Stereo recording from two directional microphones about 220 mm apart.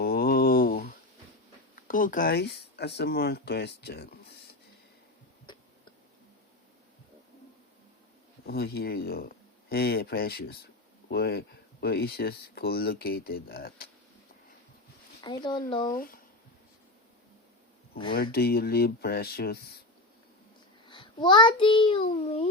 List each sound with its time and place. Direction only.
0.0 s a sound: 45° left (ahead or behind)
1.9 s speech: 40° left (ahead or behind)
8.4 s speech: 45° left (ahead or behind)
15.2 s speech: 20° left (ahead or behind)
15.8 s speech: 40° left (ahead or behind)
17.9 s speech: 20° left (ahead or behind)
18.2 s speech: 45° left (ahead or behind)
20.8 s child singing: 20° left (ahead or behind)